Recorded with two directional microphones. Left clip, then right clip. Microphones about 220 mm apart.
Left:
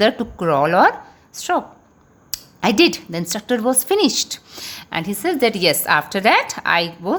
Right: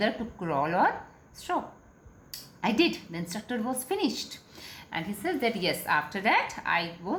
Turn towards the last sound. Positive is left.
turn(degrees=50)  # may be behind; listen again after turning